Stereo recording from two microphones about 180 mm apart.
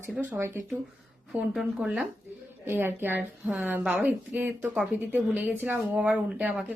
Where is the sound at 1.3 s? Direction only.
Centre (ahead or behind).